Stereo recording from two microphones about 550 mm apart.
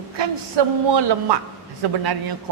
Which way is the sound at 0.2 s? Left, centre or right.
Right.